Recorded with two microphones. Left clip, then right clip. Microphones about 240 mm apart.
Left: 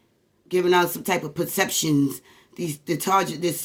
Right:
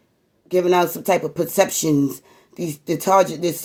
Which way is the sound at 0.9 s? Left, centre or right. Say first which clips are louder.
Right 6 dB; centre.